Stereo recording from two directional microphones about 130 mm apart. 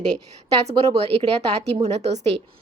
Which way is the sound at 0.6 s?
50° right (ahead or behind).